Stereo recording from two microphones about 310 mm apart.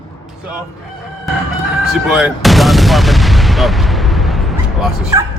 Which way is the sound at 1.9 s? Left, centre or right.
Centre.